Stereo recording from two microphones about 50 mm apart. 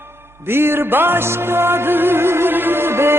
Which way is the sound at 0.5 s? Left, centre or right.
Right.